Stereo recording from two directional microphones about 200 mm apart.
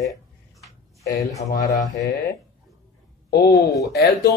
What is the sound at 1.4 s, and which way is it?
Speech, 15° left (ahead or behind).